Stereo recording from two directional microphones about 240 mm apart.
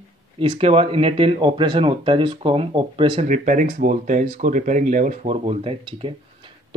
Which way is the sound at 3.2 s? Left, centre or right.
Right.